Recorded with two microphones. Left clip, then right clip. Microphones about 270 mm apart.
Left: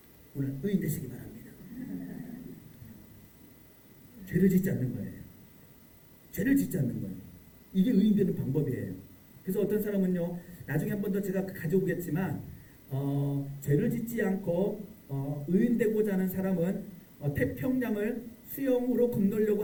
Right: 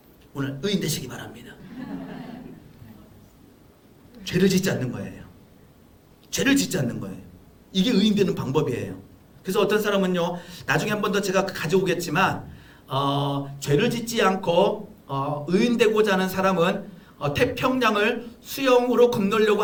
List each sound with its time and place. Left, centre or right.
0.3 s a man's voice: right
4.4 s speech: right
6.3 s speech: right
7.7 s a man's voice: right
8.1 s speech: right